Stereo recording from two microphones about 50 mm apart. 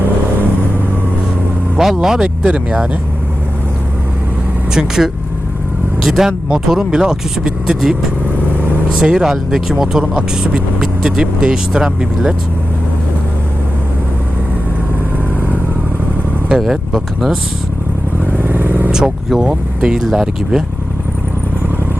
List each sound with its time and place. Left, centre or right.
1.8 s speech: centre
4.7 s speech: centre
9.0 s speech: centre
10.0 s speech: centre
16.6 s speech: centre
18.3 s vehicle: right
18.9 s speech: centre